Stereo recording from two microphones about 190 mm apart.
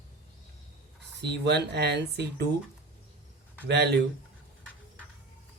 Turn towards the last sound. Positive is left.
turn(degrees=-60)  # may be behind; listen again after turning